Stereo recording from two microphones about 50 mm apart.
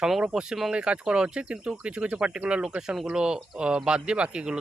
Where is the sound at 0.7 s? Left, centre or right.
Centre.